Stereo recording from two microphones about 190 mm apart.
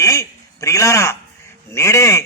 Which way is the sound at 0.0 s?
15° left (ahead or behind).